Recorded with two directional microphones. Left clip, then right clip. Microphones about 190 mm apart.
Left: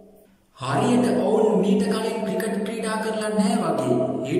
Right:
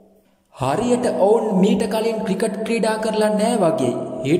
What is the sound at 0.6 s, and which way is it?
Speech, 40° right (ahead or behind).